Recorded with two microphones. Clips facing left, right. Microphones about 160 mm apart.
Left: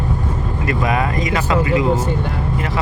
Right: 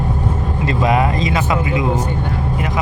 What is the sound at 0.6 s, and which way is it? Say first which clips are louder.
Speech: right 3 dB; 25° right (ahead or behind).